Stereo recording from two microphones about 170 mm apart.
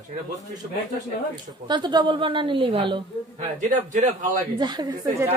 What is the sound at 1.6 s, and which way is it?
A woman's voice, 25° right (ahead or behind).